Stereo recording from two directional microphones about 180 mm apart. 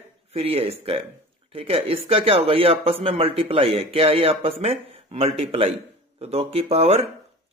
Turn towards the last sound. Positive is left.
turn(degrees=-35)  # may be behind; listen again after turning